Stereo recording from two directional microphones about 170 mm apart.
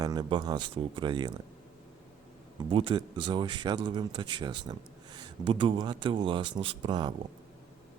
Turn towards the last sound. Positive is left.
turn(degrees=-25)  # may be behind; listen again after turning